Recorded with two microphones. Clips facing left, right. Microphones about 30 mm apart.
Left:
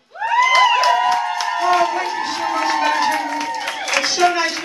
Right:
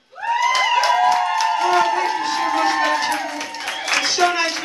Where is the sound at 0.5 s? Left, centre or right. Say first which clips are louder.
Left 5 dB; centre.